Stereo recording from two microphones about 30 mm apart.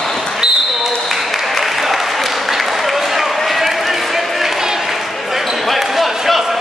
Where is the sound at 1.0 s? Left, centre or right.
Centre.